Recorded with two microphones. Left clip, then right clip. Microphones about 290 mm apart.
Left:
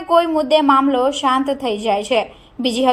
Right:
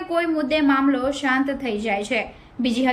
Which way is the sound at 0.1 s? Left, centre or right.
Centre.